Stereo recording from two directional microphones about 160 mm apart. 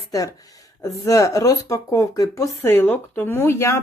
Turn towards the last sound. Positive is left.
turn(degrees=15)  # may be behind; listen again after turning